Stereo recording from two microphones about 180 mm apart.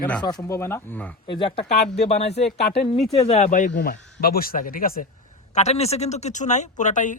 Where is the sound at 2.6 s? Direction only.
70° left (ahead or behind).